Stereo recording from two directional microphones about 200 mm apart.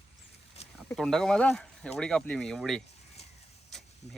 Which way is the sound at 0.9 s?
Centre (ahead or behind).